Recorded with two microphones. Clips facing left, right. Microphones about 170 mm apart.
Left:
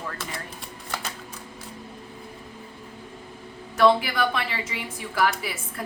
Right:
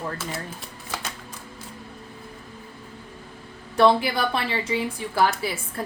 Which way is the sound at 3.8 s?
30° right (ahead or behind).